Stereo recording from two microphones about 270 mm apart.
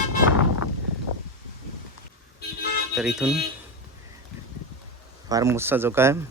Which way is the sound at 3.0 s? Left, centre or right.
Centre.